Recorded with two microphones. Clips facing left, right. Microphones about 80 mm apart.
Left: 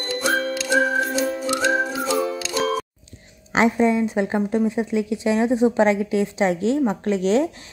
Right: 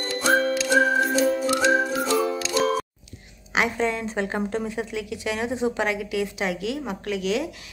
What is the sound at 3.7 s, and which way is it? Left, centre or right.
A woman's voice, centre.